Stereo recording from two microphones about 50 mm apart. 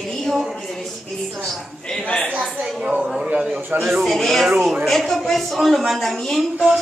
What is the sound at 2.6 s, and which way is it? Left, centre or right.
Speech, right.